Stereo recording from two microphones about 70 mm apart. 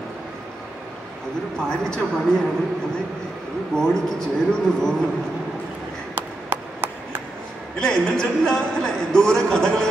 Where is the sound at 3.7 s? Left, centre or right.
Centre.